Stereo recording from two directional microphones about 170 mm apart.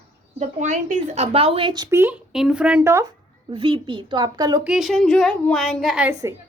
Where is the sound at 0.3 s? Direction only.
45° right (ahead or behind); by 2.1 s 15° right (ahead or behind).